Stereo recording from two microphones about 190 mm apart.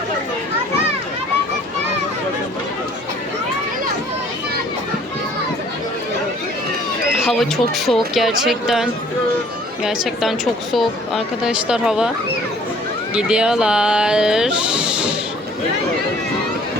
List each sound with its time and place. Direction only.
7.3 s speech: centre (ahead or behind)
13.1 s speech: 5° right (ahead or behind)